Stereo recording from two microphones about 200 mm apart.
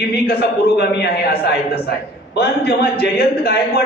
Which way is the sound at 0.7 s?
55° left (ahead or behind).